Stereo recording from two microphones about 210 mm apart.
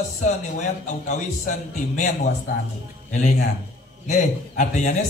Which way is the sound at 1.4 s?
35° left (ahead or behind).